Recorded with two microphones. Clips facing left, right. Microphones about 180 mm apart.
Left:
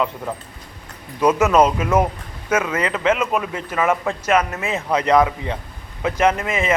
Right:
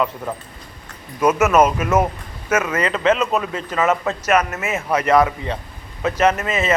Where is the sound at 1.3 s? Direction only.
15° left (ahead or behind).